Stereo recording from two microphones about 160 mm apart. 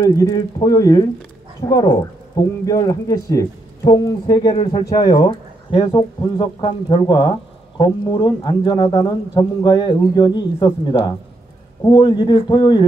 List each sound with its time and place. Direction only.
0.1 s speech: 25° left (ahead or behind)